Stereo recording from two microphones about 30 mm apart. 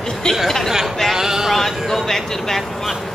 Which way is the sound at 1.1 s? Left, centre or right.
Centre.